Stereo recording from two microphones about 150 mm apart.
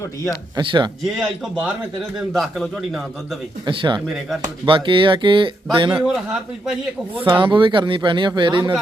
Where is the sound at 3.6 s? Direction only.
30° right (ahead or behind).